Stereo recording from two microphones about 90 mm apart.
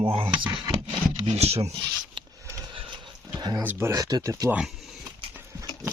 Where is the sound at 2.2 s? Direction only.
60° right (ahead or behind).